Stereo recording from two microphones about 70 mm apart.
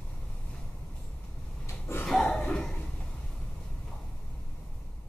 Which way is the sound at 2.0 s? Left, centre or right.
Centre.